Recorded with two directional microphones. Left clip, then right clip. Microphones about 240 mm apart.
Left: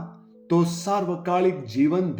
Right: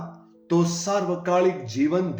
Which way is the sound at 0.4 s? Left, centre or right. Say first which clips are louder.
Even; left.